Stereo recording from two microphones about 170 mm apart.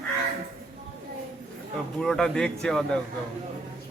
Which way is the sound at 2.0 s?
5° left (ahead or behind).